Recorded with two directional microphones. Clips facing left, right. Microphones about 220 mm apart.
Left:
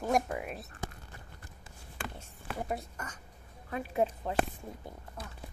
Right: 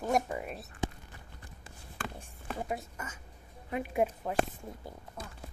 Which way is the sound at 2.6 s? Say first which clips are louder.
Left 1 dB; centre (ahead or behind).